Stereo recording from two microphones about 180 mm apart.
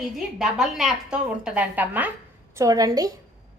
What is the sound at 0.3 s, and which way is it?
A woman's voice, 5° right (ahead or behind).